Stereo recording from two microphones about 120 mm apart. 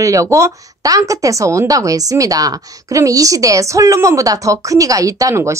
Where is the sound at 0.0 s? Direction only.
25° right (ahead or behind).